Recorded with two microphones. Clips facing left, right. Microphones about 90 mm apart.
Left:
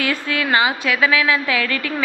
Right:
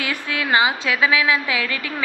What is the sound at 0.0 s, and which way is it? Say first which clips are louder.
A woman's voice: left 3 dB; 20° right (ahead or behind).